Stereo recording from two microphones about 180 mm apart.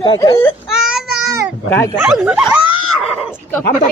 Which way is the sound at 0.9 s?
5° right (ahead or behind).